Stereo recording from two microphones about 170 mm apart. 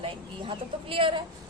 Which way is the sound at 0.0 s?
30° right (ahead or behind).